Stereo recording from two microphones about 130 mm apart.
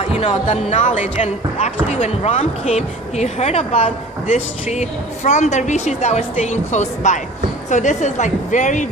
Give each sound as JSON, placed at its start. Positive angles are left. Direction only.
{"t": 0.0, "sound": "a woman's voice", "side_deg": 60}